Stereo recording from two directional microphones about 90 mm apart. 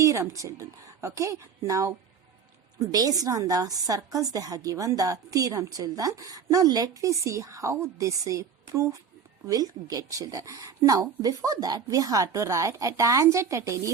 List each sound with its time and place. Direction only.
0.0 s a woman's voice: 35° right (ahead or behind)